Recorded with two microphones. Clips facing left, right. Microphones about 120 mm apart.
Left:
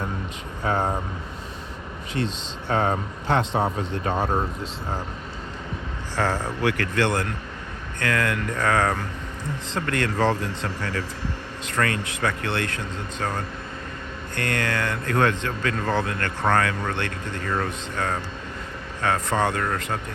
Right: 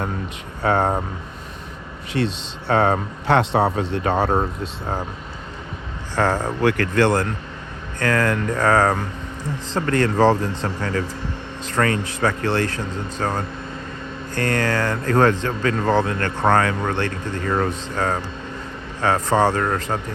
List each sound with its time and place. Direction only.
0.6 s speech: 70° right (ahead or behind)
2.1 s speech: 75° right (ahead or behind); by 4.9 s 60° right (ahead or behind)
6.1 s speech: 50° right (ahead or behind)